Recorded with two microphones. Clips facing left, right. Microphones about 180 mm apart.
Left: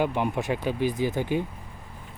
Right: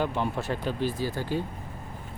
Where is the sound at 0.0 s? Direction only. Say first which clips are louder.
Left 3 dB; 15° left (ahead or behind).